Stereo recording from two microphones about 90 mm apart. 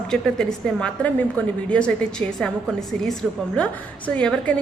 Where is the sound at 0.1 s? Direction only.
5° left (ahead or behind).